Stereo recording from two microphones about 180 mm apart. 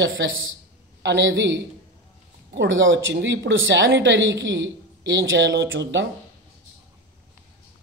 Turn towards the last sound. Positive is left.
turn(degrees=-90)